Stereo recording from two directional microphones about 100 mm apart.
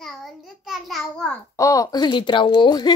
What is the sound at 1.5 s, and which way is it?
Speech, 35° left (ahead or behind).